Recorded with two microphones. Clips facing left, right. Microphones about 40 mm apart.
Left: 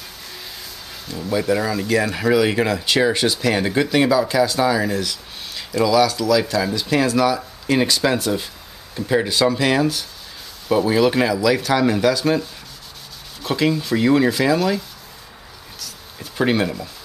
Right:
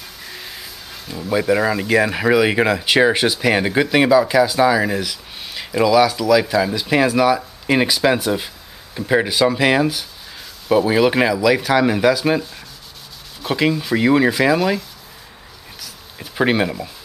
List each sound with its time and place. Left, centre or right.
0.3 s a sound: centre
1.3 s speech: centre
15.8 s insect: centre